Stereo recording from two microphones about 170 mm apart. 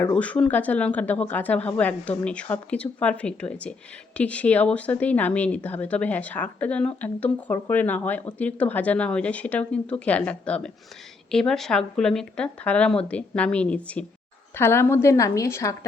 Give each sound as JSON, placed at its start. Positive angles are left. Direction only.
{"t": 0.0, "sound": "speech", "side_deg": 10}